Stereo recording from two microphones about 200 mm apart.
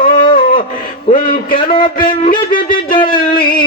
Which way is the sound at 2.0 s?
25° left (ahead or behind).